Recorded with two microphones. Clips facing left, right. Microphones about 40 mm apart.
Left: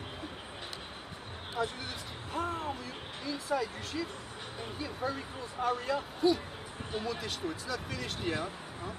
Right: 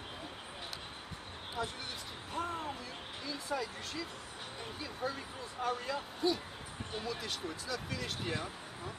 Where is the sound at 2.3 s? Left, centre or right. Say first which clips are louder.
Left 3 dB; centre.